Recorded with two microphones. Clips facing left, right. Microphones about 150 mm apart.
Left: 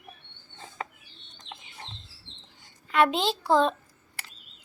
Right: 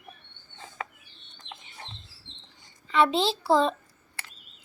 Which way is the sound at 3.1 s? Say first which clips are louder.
Right 2 dB; 30° right (ahead or behind).